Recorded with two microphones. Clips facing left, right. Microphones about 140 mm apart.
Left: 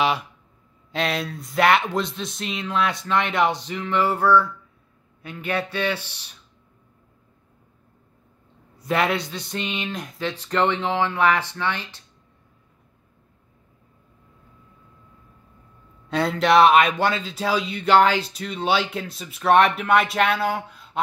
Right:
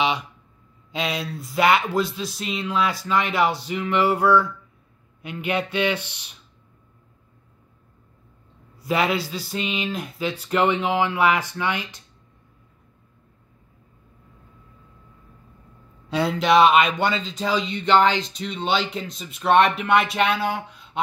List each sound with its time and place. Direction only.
0.9 s speech: centre (ahead or behind); by 6.3 s 15° right (ahead or behind)
8.7 s speech: centre (ahead or behind)
16.1 s speech: centre (ahead or behind)